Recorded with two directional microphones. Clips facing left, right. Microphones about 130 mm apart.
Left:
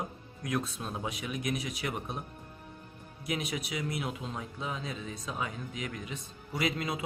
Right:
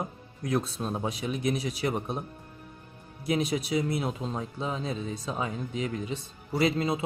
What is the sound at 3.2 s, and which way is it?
Speech, 35° right (ahead or behind).